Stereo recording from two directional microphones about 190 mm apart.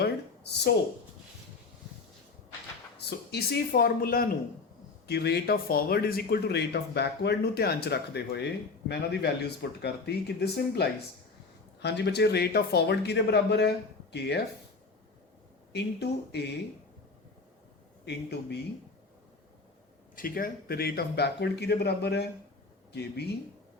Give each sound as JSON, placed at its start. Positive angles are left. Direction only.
{"t": 0.0, "sound": "a sound", "side_deg": 60}
{"t": 3.1, "sound": "speech", "side_deg": 60}
{"t": 15.7, "sound": "speech", "side_deg": 60}
{"t": 18.0, "sound": "speech", "side_deg": 60}
{"t": 20.1, "sound": "speech", "side_deg": 50}